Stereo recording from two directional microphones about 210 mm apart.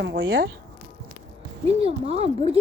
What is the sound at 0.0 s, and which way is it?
Speech, 55° right (ahead or behind).